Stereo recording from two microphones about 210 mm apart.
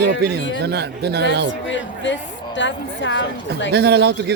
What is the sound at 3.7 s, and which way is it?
Speech, 50° right (ahead or behind).